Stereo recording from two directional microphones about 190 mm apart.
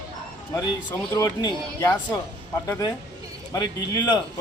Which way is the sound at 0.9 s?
15° left (ahead or behind).